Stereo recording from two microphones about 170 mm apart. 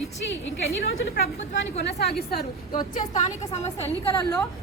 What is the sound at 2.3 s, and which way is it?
Speech, 65° left (ahead or behind).